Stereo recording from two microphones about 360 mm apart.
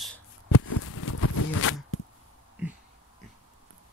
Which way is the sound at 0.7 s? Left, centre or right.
Left.